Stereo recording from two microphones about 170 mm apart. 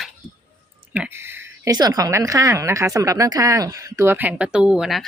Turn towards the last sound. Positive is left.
turn(degrees=0)  # may be behind; listen again after turning